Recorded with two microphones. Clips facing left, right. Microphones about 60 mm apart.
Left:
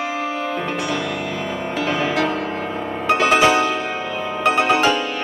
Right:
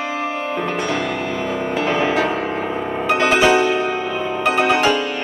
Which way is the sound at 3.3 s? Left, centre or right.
Centre.